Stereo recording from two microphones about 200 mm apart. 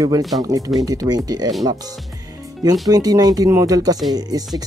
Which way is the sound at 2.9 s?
20° right (ahead or behind).